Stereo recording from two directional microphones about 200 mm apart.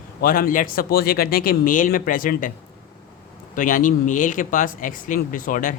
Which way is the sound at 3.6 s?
40° left (ahead or behind).